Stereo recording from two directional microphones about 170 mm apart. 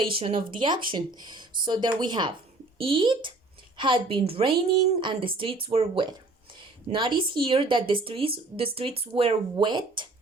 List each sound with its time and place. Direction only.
0.1 s a woman's voice: 30° right (ahead or behind)